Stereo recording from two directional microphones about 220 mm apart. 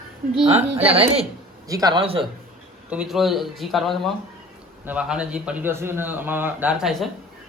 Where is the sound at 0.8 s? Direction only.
25° right (ahead or behind).